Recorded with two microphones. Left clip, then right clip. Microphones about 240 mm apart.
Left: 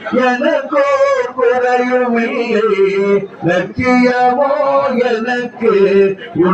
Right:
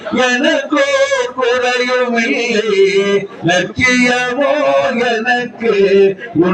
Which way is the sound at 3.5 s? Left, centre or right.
Right.